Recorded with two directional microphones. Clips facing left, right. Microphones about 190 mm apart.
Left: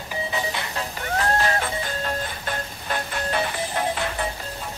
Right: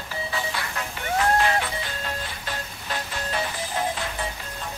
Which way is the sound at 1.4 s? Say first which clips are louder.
Even; 40° left (ahead or behind).